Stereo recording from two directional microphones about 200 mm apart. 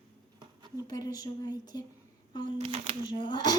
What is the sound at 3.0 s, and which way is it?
Speech, 25° left (ahead or behind).